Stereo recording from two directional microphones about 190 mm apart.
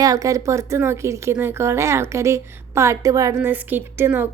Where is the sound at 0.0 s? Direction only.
20° right (ahead or behind).